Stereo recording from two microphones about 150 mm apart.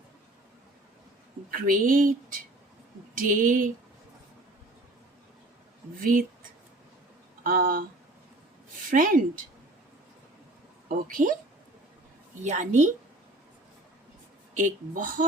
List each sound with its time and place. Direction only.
1.5 s speech: 65° right (ahead or behind)
6.0 s speech: 70° right (ahead or behind)
7.4 s speech: 70° right (ahead or behind)
8.9 s speech: 65° right (ahead or behind)
10.8 s speech: 65° right (ahead or behind)
12.4 s a woman's voice: 50° right (ahead or behind)
14.5 s speech: 60° right (ahead or behind)